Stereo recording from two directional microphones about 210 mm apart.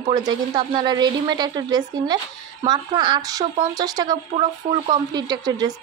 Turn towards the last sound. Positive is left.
turn(degrees=-20)  # may be behind; listen again after turning